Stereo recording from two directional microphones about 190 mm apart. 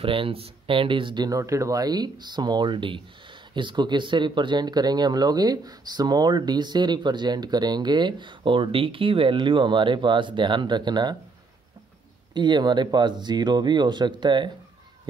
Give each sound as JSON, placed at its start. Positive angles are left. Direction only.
{"t": 0.0, "sound": "speech", "side_deg": -30}
{"t": 12.4, "sound": "speech", "side_deg": -25}